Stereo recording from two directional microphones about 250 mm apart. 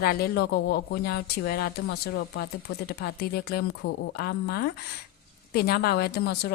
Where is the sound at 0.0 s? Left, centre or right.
Left.